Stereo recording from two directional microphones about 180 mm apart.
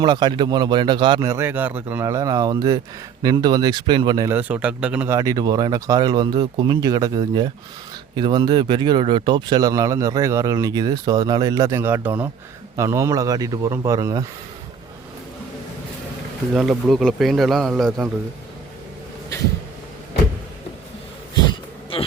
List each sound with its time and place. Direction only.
0.0 s speech: 25° right (ahead or behind)
4.4 s speech: 10° right (ahead or behind)
16.6 s a man's voice: centre (ahead or behind)